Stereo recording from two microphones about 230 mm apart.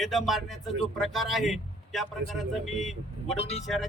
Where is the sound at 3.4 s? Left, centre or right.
Left.